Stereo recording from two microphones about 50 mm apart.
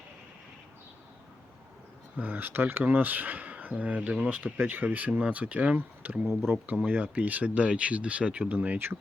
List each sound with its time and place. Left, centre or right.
2.1 s speech: right
6.2 s speech: right
6.8 s speech: right
8.4 s speech: right